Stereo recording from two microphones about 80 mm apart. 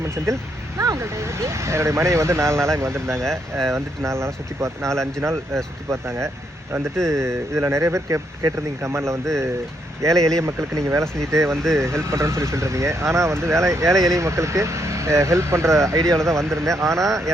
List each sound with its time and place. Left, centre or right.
0.8 s speech: right
3.2 s speech: centre
3.8 s speech: right